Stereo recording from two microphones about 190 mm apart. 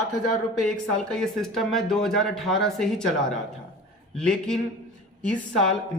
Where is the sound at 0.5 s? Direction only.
5° left (ahead or behind).